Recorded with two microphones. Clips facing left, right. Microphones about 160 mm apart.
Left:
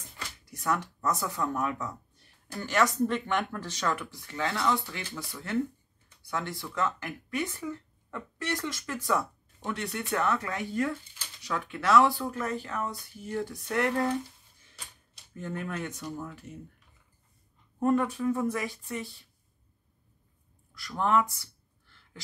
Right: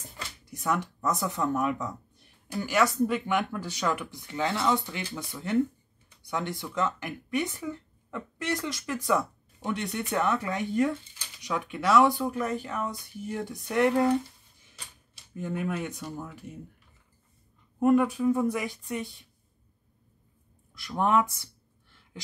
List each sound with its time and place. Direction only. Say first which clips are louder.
0.6 s speech: right 1 dB; 15° right (ahead or behind)
15.3 s speech: right 4 dB; 10° right (ahead or behind)
17.7 s speech: right 4 dB; 10° right (ahead or behind)
20.7 s speech: right 2 dB; 20° right (ahead or behind)